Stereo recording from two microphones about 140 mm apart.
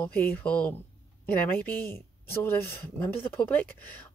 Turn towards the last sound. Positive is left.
turn(degrees=10)  # may be behind; listen again after turning